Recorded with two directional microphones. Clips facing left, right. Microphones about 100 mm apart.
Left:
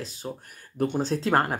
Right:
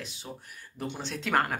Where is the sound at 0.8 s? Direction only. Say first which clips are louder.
Left 10 dB; 45° left (ahead or behind).